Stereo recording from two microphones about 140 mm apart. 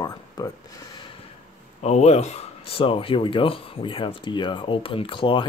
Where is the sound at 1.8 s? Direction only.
50° left (ahead or behind).